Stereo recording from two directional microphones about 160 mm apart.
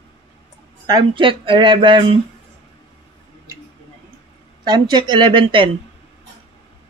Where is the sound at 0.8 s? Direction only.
25° right (ahead or behind).